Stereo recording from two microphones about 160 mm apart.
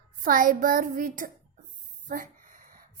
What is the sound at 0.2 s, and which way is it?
A woman's voice, 60° right (ahead or behind).